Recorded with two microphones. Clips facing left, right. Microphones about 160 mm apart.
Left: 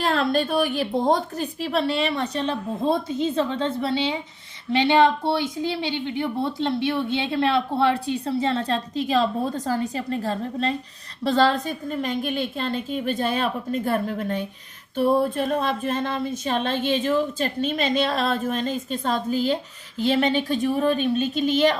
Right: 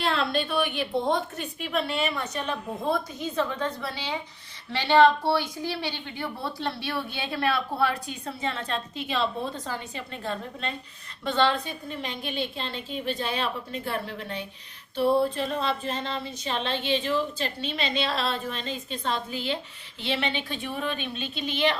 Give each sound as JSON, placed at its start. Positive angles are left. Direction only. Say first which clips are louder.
{"t": 0.0, "sound": "a woman's voice", "louder": "left 5 dB", "side_deg": 45}